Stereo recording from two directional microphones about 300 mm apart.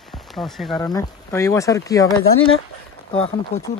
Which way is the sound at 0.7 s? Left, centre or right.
Centre.